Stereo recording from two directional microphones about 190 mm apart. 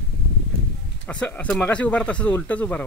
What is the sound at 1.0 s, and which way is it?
Speech, 5° left (ahead or behind).